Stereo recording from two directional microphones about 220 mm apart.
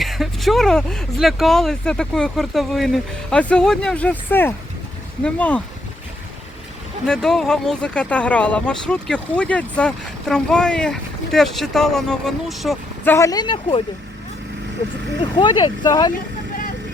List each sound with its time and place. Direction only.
0.0 s speech: centre (ahead or behind)
7.0 s speech: centre (ahead or behind)
13.1 s speech: 15° left (ahead or behind)
15.2 s speech: 20° left (ahead or behind)